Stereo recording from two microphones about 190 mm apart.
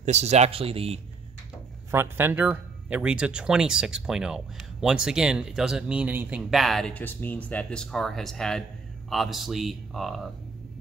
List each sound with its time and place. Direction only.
0.0 s speech: 35° right (ahead or behind)
1.9 s speech: 10° right (ahead or behind)